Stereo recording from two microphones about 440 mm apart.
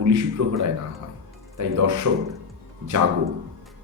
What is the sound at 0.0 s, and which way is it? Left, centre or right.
Speech, right.